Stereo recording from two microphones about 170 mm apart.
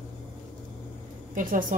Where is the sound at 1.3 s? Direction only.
50° right (ahead or behind).